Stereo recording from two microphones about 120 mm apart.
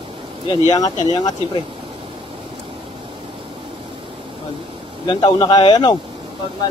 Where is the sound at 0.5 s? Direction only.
30° left (ahead or behind).